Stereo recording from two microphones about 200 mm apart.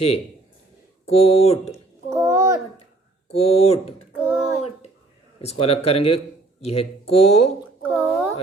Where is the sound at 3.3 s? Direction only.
30° left (ahead or behind).